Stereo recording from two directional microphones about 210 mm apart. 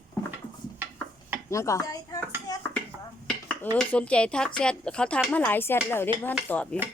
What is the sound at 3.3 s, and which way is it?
Dishes, 5° left (ahead or behind).